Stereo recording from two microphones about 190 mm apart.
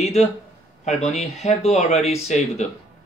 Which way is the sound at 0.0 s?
35° left (ahead or behind).